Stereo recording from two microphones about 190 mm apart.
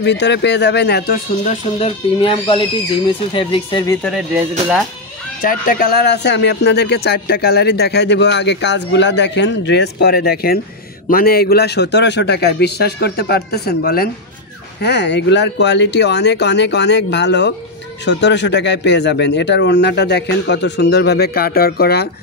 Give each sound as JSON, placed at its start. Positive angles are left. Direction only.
{"t": 0.0, "sound": "speech", "side_deg": 65}
{"t": 1.4, "sound": "speech", "side_deg": 35}
{"t": 5.4, "sound": "speech", "side_deg": 50}